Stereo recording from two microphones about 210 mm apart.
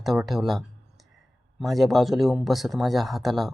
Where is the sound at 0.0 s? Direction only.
Centre (ahead or behind).